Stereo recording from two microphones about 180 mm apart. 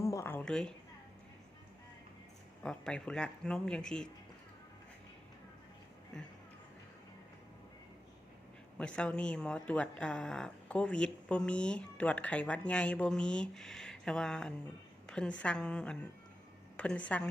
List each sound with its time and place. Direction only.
0.0 s a sound: 15° left (ahead or behind)
2.6 s speech: 5° left (ahead or behind)
8.8 s a woman's voice: 5° left (ahead or behind)